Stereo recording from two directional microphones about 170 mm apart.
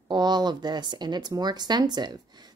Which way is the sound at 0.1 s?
25° right (ahead or behind).